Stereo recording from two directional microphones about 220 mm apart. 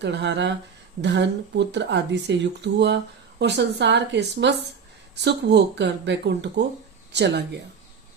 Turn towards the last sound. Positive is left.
turn(degrees=-50)  # may be behind; listen again after turning